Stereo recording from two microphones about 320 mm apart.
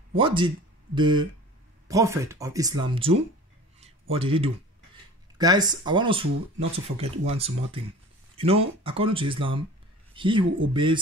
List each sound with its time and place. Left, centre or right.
0.1 s speech: centre
3.8 s a sound: centre
5.4 s speech: centre